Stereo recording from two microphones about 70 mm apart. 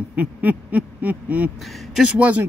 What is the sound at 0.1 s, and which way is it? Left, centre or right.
Speech, right.